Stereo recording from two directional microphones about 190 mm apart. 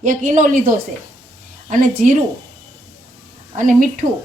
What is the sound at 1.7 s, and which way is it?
Speech, 45° right (ahead or behind).